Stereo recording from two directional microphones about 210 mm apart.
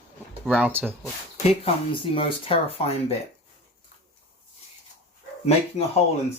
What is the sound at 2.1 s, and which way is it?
Speech, 25° left (ahead or behind).